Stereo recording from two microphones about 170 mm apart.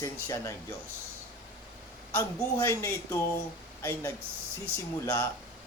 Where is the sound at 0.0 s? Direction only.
20° left (ahead or behind).